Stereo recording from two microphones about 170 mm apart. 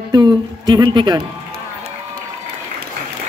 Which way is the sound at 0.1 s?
25° right (ahead or behind).